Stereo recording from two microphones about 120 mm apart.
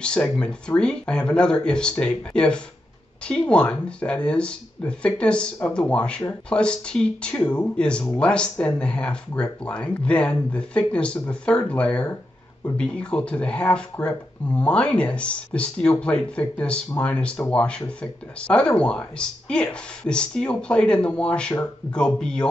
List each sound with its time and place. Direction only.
0.0 s speech: 10° left (ahead or behind)